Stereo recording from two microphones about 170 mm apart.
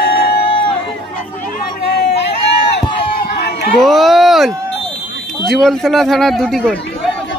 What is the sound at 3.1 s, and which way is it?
Run, 70° left (ahead or behind).